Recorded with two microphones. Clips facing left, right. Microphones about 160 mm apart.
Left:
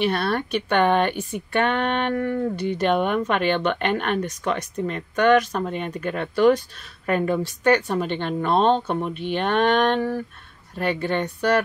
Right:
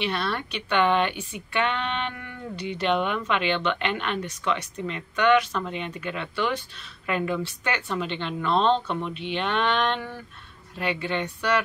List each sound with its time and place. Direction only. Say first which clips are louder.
0.0 s speech: left 6 dB; 45° left (ahead or behind)